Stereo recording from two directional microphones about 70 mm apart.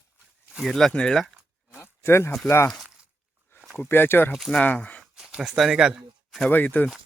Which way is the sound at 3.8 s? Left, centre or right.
Left.